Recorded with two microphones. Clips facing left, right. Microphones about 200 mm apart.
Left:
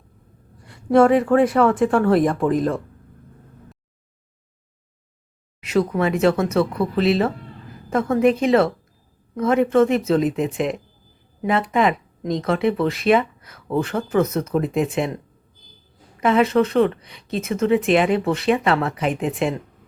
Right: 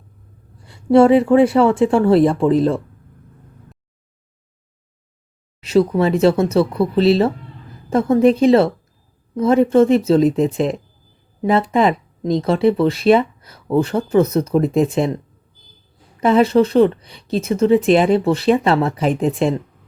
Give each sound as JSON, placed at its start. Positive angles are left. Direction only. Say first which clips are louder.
{"t": 0.7, "sound": "speech", "louder": "right 4 dB", "side_deg": -30}
{"t": 5.6, "sound": "speech", "louder": "right 5 dB", "side_deg": -30}
{"t": 16.2, "sound": "speech", "louder": "right 4 dB", "side_deg": -35}